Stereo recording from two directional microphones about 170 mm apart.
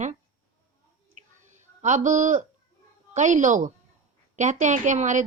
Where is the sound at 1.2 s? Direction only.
45° right (ahead or behind).